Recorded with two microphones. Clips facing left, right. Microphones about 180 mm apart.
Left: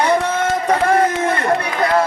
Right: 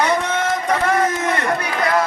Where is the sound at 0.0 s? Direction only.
30° left (ahead or behind).